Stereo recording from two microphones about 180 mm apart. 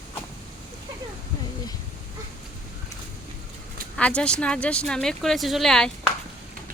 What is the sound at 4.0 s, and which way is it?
Speech, 5° left (ahead or behind).